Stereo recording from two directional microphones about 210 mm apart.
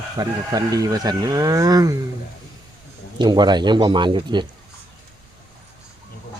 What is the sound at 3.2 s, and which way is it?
Speech, 20° right (ahead or behind).